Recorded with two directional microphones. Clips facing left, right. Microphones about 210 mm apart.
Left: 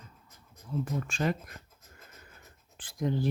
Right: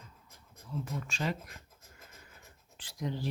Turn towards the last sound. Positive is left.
turn(degrees=50)  # may be behind; listen again after turning